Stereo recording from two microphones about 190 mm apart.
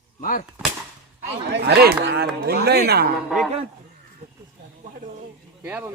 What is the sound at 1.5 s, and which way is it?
Speech, 60° right (ahead or behind).